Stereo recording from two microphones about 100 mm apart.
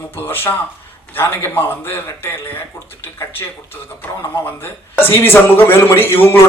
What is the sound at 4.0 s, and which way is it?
A man's voice, 20° left (ahead or behind).